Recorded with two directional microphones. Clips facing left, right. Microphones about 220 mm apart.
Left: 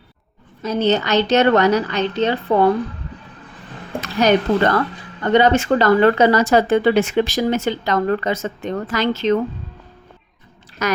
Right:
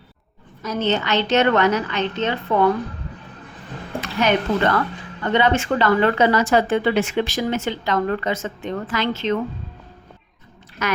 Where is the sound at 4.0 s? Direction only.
40° left (ahead or behind).